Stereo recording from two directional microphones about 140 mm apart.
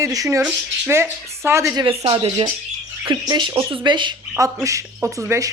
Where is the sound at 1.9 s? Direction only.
45° right (ahead or behind).